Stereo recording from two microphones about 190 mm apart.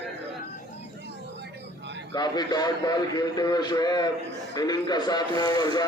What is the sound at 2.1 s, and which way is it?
A man's voice, 20° left (ahead or behind).